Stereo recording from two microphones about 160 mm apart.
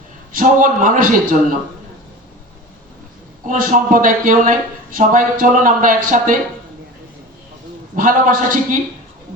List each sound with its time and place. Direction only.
0.3 s speech: 60° right (ahead or behind)
3.4 s speech: 55° right (ahead or behind)
7.9 s speech: 60° right (ahead or behind)